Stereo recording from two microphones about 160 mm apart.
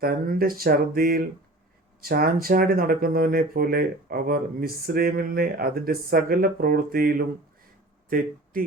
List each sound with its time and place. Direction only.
0.0 s speech: 65° right (ahead or behind)
8.5 s speech: 65° right (ahead or behind)